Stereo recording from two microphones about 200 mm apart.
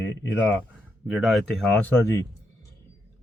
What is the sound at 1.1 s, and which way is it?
Speech, centre (ahead or behind).